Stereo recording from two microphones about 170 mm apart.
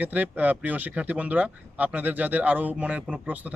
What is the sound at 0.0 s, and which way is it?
Speech, 10° right (ahead or behind).